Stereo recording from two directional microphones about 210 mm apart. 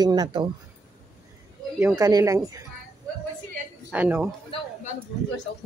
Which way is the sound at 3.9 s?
10° right (ahead or behind).